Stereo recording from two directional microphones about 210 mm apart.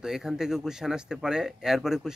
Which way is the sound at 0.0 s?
Centre (ahead or behind).